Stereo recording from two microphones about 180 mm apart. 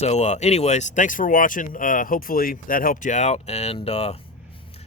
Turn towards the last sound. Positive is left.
turn(degrees=35)  # may be behind; listen again after turning